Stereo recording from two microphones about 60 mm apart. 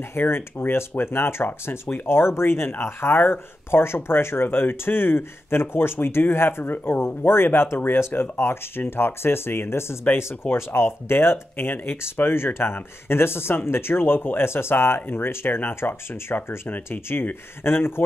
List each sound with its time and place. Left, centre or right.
0.1 s speech: left
2.0 s speech: left